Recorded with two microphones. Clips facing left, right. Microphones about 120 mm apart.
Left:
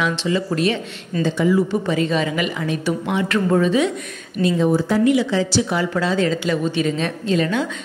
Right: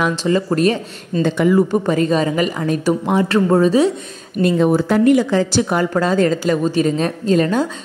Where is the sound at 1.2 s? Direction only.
55° right (ahead or behind); by 3.9 s 35° right (ahead or behind).